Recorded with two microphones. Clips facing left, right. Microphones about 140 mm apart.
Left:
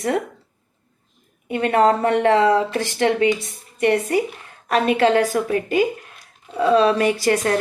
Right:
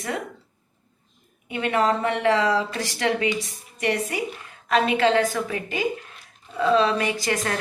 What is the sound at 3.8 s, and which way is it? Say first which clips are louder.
A woman's voice: left 7 dB; 45° left (ahead or behind).